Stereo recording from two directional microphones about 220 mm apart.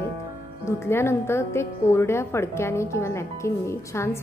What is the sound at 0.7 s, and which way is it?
A woman's voice, 10° left (ahead or behind).